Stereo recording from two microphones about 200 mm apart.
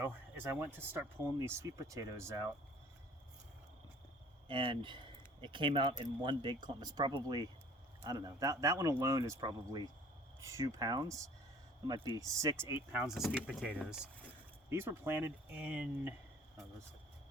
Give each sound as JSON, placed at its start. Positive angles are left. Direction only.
{"t": 0.0, "sound": "speech", "side_deg": -10}
{"t": 4.4, "sound": "speech", "side_deg": -25}